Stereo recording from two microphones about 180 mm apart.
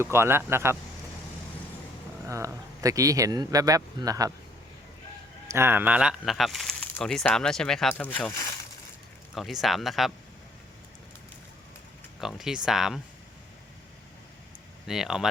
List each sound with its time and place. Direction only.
0.0 s speech: 15° right (ahead or behind)
2.2 s speech: 15° right (ahead or behind)
5.5 s speech: 15° right (ahead or behind); by 8.5 s 15° left (ahead or behind)
9.3 s speech: centre (ahead or behind)
12.2 s speech: centre (ahead or behind)
14.8 s speech: centre (ahead or behind)